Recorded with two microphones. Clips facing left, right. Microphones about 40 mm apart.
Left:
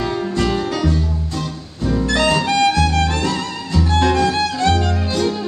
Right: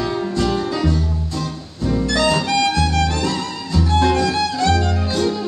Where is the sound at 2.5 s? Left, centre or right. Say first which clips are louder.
Left 2 dB; left.